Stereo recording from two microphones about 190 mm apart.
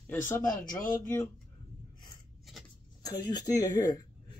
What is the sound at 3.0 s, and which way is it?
Speech, 20° left (ahead or behind).